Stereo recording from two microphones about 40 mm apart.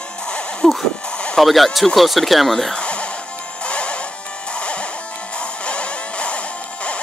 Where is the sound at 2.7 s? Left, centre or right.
Left.